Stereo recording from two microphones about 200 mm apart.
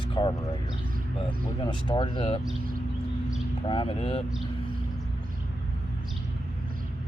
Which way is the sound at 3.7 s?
25° left (ahead or behind).